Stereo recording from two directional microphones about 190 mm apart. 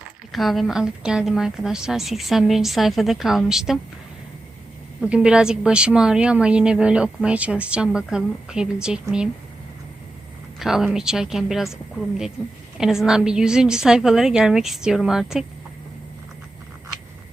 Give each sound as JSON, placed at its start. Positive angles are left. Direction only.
{"t": 0.3, "sound": "a woman's voice", "side_deg": 0}
{"t": 4.9, "sound": "a woman's voice", "side_deg": -5}
{"t": 10.6, "sound": "a woman's voice", "side_deg": 0}